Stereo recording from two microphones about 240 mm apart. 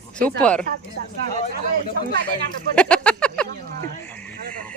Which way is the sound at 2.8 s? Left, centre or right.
Centre.